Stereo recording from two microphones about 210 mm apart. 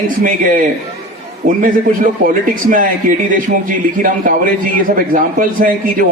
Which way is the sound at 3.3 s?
40° right (ahead or behind).